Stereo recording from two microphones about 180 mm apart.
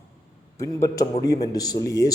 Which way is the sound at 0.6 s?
20° left (ahead or behind).